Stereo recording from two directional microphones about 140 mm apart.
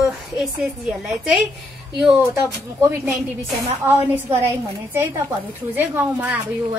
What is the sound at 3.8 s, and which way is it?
Speech, 15° right (ahead or behind).